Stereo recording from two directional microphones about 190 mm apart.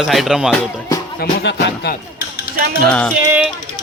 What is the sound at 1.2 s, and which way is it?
Speech, 55° left (ahead or behind).